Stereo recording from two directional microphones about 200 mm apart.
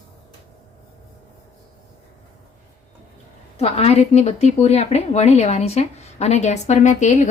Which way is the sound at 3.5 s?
30° left (ahead or behind).